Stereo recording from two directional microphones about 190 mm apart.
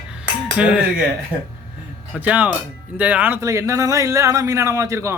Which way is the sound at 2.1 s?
10° right (ahead or behind).